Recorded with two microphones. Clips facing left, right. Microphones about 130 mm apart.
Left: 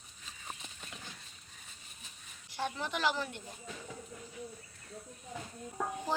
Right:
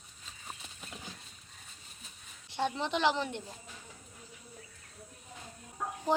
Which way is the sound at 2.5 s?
25° right (ahead or behind).